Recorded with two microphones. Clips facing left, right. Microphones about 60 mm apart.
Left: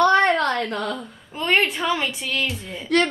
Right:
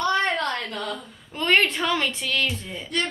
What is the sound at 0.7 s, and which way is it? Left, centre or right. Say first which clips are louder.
Speech: left 4 dB; left.